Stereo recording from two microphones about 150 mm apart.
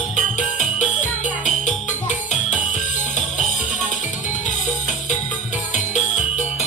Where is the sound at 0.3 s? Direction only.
55° left (ahead or behind).